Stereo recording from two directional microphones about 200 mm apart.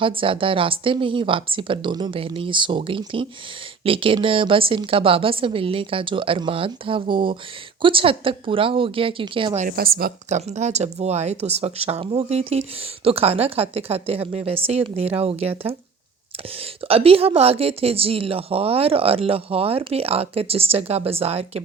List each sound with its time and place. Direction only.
0.0 s speech: 25° right (ahead or behind)
9.6 s speech: 45° right (ahead or behind); by 15.7 s 30° right (ahead or behind)
16.9 s speech: 30° right (ahead or behind)